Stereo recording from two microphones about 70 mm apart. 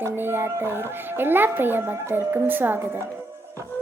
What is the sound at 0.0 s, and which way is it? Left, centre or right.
Speech, right.